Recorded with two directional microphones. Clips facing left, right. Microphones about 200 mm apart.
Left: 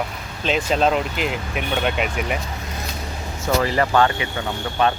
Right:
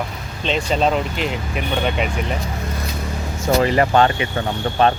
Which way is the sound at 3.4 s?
20° right (ahead or behind).